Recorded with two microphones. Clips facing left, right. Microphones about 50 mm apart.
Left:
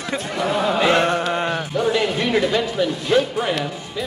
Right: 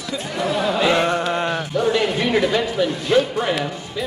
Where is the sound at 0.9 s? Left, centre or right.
Left.